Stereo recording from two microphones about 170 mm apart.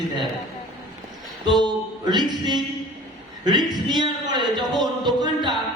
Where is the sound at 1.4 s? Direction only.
25° right (ahead or behind).